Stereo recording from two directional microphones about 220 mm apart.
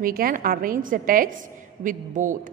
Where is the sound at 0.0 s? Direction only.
40° right (ahead or behind).